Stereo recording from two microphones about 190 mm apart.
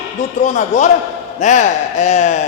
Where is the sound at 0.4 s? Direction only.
40° left (ahead or behind).